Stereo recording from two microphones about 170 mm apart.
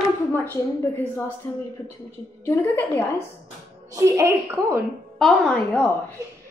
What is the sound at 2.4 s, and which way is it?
Speech, 10° left (ahead or behind).